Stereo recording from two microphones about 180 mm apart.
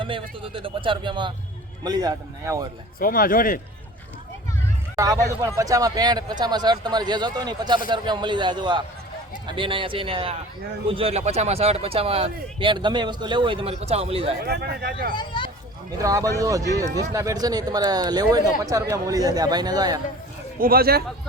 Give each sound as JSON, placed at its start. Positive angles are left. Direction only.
{"t": 0.0, "sound": "a man's voice", "side_deg": -30}
{"t": 3.0, "sound": "a man's voice", "side_deg": 50}
{"t": 4.9, "sound": "a man's voice", "side_deg": -20}
{"t": 14.4, "sound": "a man's voice", "side_deg": -60}
{"t": 15.1, "sound": "speech", "side_deg": 25}
{"t": 16.0, "sound": "a man's voice", "side_deg": -20}
{"t": 20.6, "sound": "a man's voice", "side_deg": -55}